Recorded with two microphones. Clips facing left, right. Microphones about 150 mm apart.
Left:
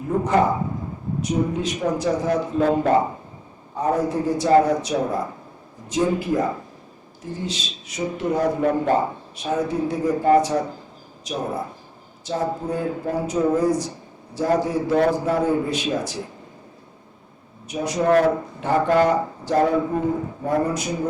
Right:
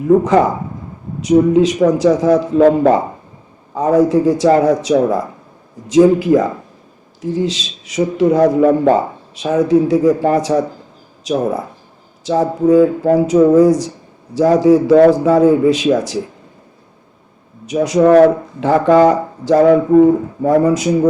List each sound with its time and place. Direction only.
1.2 s speech: 90° right
17.7 s speech: 90° right